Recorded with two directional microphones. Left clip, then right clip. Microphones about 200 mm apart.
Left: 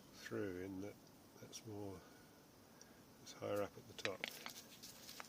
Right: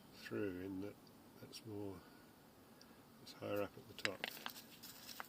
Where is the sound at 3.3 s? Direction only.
5° right (ahead or behind).